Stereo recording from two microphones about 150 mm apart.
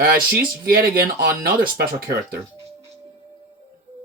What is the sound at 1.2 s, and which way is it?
Speech, 90° right.